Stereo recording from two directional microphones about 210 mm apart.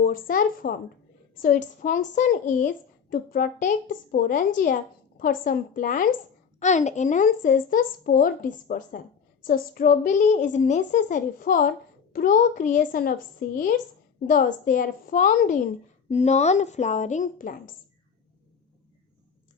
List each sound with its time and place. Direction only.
0.0 s a woman's voice: 40° left (ahead or behind)